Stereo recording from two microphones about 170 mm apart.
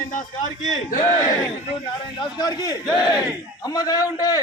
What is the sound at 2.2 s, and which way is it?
A man's voice, 25° left (ahead or behind).